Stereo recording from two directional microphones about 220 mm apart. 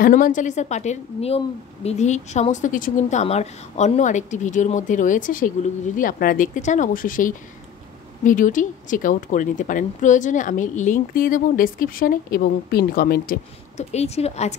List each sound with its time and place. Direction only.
0.0 s a woman's voice: 35° left (ahead or behind)